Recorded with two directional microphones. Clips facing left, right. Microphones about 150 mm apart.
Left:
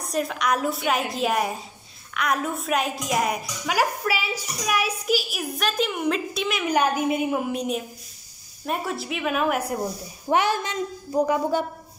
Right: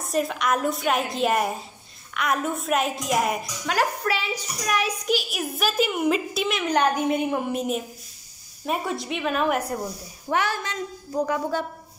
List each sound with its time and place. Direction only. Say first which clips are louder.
0.0 s a woman's voice: right 1 dB; centre (ahead or behind)
10.2 s a woman's voice: left 3 dB; 20° left (ahead or behind)